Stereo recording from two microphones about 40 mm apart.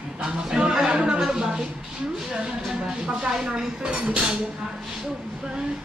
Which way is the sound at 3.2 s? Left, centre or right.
Centre.